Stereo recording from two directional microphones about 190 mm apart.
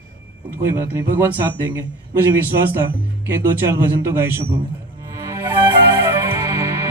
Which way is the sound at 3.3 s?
15° right (ahead or behind).